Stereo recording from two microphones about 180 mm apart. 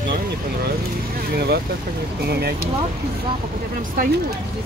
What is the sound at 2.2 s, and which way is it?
Speech, 65° right (ahead or behind).